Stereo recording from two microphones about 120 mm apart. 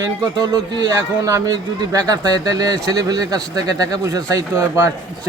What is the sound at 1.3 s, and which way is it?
A man's voice, 25° right (ahead or behind).